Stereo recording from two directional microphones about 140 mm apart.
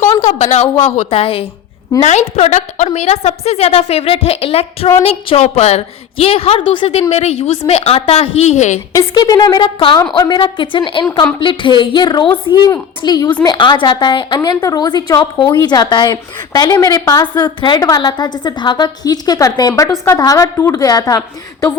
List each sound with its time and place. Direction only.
0.2 s a woman's voice: 55° left (ahead or behind)
0.8 s a woman's voice: 40° left (ahead or behind); by 8.8 s 55° left (ahead or behind)
8.9 s a woman's voice: 25° left (ahead or behind)